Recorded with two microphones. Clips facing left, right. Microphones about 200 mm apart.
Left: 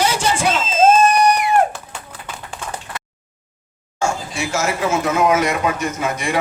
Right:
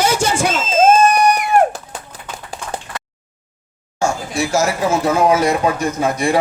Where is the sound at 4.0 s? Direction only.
40° right (ahead or behind).